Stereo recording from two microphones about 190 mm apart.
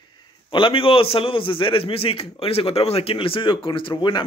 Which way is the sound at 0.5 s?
25° left (ahead or behind).